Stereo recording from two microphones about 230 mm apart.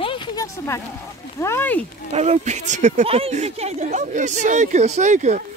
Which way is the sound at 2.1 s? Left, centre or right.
Right.